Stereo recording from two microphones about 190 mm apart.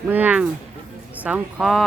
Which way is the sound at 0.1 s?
10° right (ahead or behind).